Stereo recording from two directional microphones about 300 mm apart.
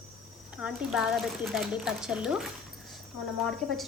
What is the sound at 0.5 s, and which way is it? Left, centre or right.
A woman's voice, centre.